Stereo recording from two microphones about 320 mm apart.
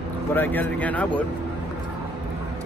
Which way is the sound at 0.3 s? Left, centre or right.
Centre.